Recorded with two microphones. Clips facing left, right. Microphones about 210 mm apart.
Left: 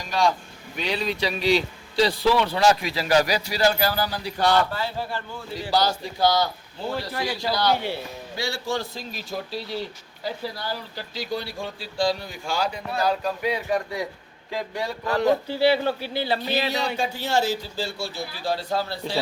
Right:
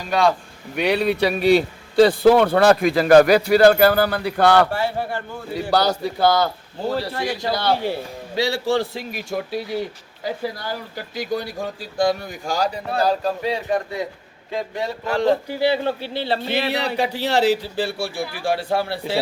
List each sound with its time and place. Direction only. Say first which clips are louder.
0.8 s a man's voice: right 8 dB; 60° right (ahead or behind)
6.8 s speech: right 4 dB; 35° right (ahead or behind)
8.4 s speech: right 8 dB; 75° right (ahead or behind)
8.8 s a man's voice: right 7 dB; 65° right (ahead or behind); by 16.5 s 25° right (ahead or behind)
16.5 s a man's voice: right 3 dB; 60° right (ahead or behind)
17.9 s speech: right 5 dB; 30° right (ahead or behind)
18.3 s speech: right 4 dB; 65° right (ahead or behind)